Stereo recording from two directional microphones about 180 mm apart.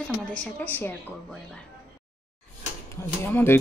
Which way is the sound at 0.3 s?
10° left (ahead or behind).